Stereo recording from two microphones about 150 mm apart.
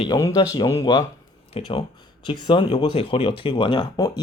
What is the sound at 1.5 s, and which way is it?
Speech, 35° left (ahead or behind).